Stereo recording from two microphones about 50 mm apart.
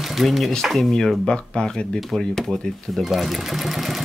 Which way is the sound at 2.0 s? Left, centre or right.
Centre.